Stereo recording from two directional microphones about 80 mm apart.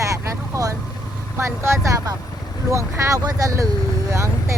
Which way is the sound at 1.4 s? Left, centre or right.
Right.